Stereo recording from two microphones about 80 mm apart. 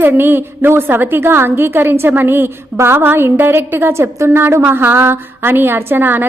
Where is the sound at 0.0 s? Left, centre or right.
Right.